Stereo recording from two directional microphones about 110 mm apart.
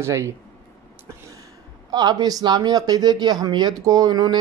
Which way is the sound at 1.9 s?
35° right (ahead or behind).